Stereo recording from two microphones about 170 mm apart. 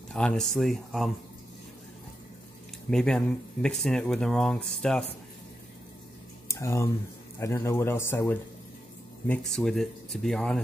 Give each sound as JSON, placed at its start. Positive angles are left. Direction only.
{"t": 0.1, "sound": "speech", "side_deg": 5}
{"t": 2.9, "sound": "speech", "side_deg": 5}
{"t": 6.4, "sound": "a sound", "side_deg": 15}
{"t": 7.3, "sound": "speech", "side_deg": 15}
{"t": 9.3, "sound": "speech", "side_deg": 5}